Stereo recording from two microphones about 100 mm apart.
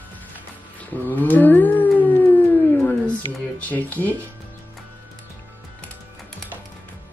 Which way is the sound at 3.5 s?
15° left (ahead or behind).